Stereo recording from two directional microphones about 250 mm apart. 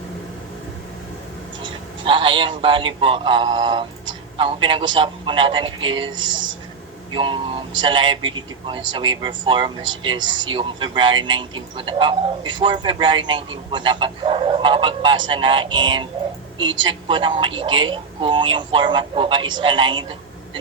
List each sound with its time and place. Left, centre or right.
1.6 s speech: centre
17.1 s speech: centre